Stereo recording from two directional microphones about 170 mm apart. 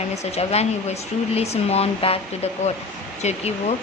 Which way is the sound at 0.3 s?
40° left (ahead or behind).